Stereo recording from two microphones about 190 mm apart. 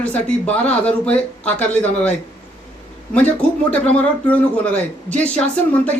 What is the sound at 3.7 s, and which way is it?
Speech, 5° left (ahead or behind).